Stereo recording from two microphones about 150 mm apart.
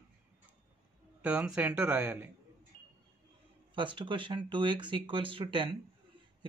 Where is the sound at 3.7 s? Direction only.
35° right (ahead or behind).